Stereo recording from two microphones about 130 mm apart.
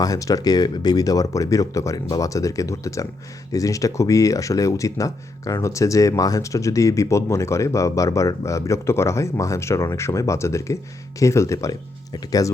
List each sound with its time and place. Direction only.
0.0 s speech: 25° left (ahead or behind)